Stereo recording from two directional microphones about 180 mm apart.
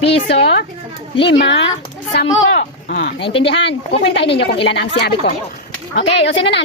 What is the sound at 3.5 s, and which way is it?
A woman's voice, 75° left (ahead or behind).